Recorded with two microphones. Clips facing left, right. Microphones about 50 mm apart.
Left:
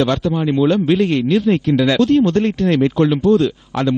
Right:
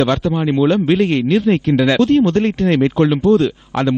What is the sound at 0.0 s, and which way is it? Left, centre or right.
A man's voice, right.